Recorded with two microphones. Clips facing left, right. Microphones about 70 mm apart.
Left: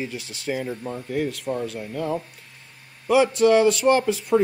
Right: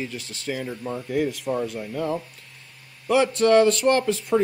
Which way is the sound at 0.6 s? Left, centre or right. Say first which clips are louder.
Even; centre.